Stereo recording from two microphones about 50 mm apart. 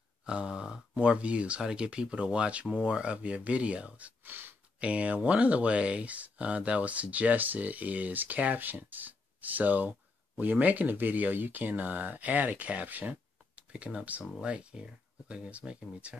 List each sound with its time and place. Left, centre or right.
0.2 s speech: centre
4.3 s a sound: right
4.7 s speech: right